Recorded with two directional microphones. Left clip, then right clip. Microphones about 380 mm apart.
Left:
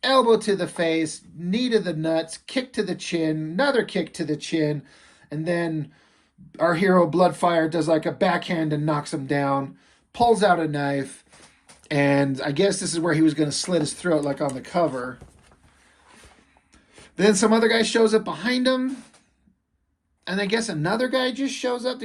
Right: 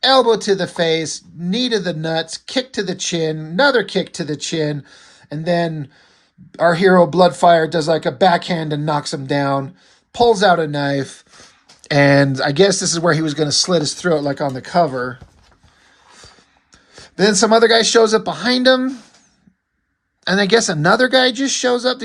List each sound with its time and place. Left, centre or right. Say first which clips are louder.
0.0 s speech: right 5 dB; centre
16.9 s speech: right 4 dB; centre
20.2 s speech: right 10 dB; centre